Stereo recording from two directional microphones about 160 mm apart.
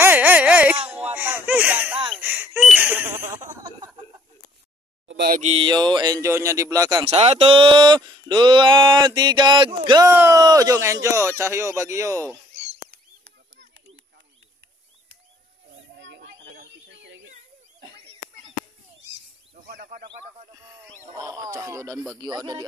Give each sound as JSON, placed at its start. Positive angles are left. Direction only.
{"t": 0.0, "sound": "a sound", "side_deg": -10}
{"t": 5.1, "sound": "a sound", "side_deg": -75}
{"t": 5.4, "sound": "mantra", "side_deg": -40}
{"t": 5.7, "sound": "speech", "side_deg": -30}
{"t": 7.1, "sound": "speech", "side_deg": -40}
{"t": 10.0, "sound": "speech", "side_deg": -15}
{"t": 16.2, "sound": "a sound", "side_deg": -80}
{"t": 19.6, "sound": "snake", "side_deg": -65}
{"t": 21.2, "sound": "speech", "side_deg": -20}